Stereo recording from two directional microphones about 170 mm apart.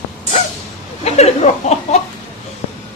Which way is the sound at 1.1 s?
40° left (ahead or behind).